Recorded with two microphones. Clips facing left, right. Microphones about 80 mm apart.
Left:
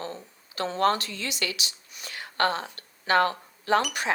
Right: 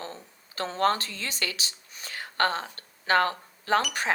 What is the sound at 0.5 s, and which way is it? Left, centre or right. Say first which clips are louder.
Speech: left 1 dB; right.